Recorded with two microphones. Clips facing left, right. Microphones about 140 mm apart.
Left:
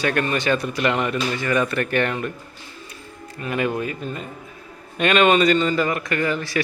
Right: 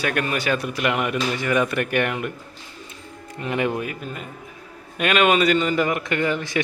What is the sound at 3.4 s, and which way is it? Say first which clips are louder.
A man's voice: even; 20° right (ahead or behind).